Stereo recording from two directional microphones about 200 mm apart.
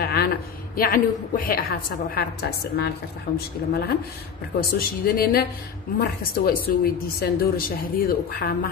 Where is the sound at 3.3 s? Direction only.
50° left (ahead or behind).